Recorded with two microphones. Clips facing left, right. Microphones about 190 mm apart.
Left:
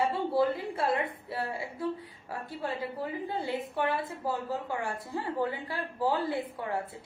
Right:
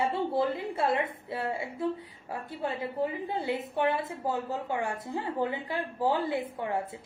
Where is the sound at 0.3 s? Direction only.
20° right (ahead or behind).